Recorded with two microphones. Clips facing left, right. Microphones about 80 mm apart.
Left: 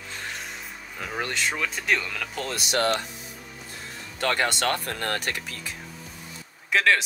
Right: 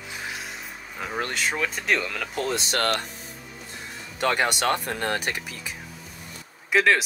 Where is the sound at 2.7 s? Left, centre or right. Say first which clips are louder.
Left 5 dB; right.